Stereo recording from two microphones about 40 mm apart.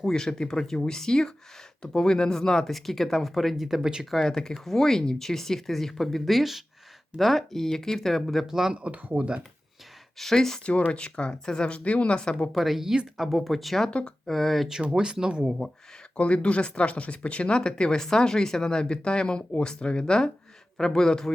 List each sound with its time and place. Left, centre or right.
0.0 s speech: centre
3.8 s speech: centre
4.1 s speech: centre
8.4 s speech: centre
9.1 s speech: right
10.3 s speech: centre
10.6 s speech: left
11.8 s speech: left
12.5 s speech: centre
14.9 s speech: right
15.4 s speech: centre
16.1 s speech: left; by 21.3 s centre